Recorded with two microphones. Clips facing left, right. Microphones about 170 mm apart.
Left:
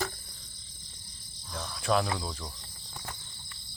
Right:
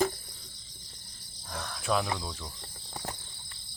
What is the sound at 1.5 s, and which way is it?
Cricket, 60° right (ahead or behind).